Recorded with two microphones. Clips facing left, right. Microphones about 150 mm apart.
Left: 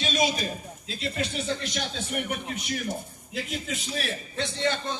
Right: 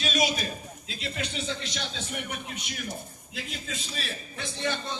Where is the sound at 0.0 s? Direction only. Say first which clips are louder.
Left 1 dB; 25° left (ahead or behind).